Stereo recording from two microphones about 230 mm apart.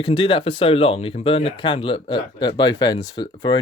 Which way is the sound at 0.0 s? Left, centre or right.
Left.